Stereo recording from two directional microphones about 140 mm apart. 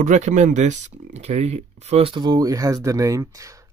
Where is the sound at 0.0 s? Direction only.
60° right (ahead or behind).